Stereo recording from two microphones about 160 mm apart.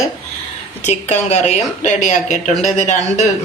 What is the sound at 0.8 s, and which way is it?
A man's voice, 45° left (ahead or behind).